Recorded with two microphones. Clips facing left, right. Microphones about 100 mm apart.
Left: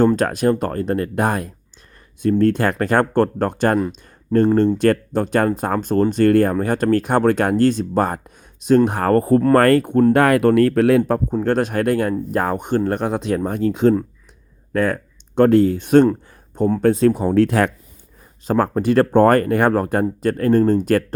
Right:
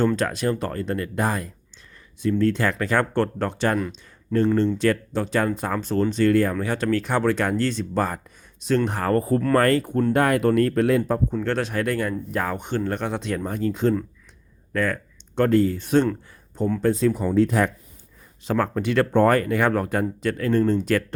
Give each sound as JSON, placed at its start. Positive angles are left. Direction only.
{"t": 0.2, "sound": "speech", "side_deg": 50}
{"t": 10.1, "sound": "speech", "side_deg": 65}
{"t": 11.3, "sound": "speech", "side_deg": 45}
{"t": 14.7, "sound": "speech", "side_deg": 45}
{"t": 15.4, "sound": "speech", "side_deg": 60}
{"t": 18.4, "sound": "speech", "side_deg": 40}